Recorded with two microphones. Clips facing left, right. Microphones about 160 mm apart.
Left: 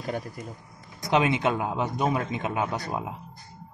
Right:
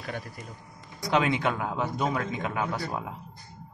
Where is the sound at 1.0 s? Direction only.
20° left (ahead or behind).